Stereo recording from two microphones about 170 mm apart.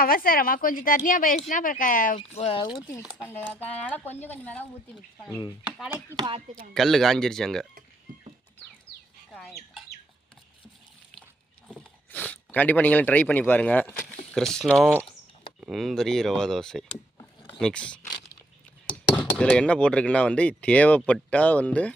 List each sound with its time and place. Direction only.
0.0 s a woman's voice: 60° left (ahead or behind); by 2.7 s 30° left (ahead or behind)
3.0 s speech: 5° right (ahead or behind)
3.5 s speech: 10° left (ahead or behind)
6.1 s speech: 25° right (ahead or behind)
6.7 s speech: centre (ahead or behind)
11.7 s speech: 10° left (ahead or behind)
19.1 s speech: 5° left (ahead or behind)